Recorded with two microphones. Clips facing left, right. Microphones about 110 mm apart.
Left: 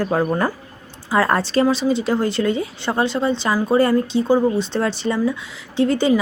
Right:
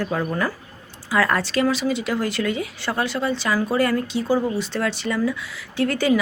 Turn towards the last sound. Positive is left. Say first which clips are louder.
# left 3 dB
turn(degrees=25)  # may be behind; listen again after turning